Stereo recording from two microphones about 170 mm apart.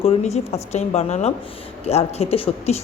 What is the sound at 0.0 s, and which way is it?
A woman's voice, 35° left (ahead or behind).